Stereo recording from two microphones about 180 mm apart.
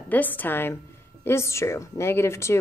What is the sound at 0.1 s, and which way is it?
A woman's voice, 10° left (ahead or behind).